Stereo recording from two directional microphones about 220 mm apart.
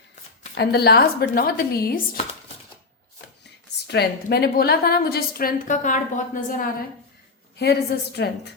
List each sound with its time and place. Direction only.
0.5 s a woman's voice: 45° left (ahead or behind)
3.8 s a woman's voice: 45° left (ahead or behind)